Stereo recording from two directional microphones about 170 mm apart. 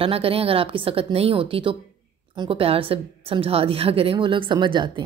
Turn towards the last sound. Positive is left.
turn(degrees=-25)  # may be behind; listen again after turning